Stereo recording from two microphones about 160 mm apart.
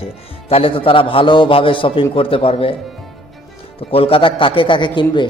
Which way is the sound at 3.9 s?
35° left (ahead or behind).